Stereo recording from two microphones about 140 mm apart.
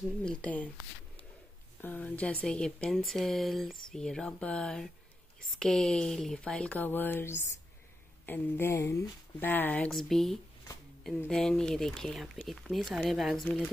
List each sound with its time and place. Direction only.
0.2 s speech: 5° left (ahead or behind)
1.8 s speech: 10° left (ahead or behind)